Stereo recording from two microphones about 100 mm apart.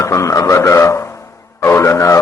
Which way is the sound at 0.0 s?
30° left (ahead or behind).